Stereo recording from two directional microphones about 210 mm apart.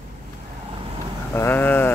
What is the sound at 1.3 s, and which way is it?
Speech, 10° left (ahead or behind).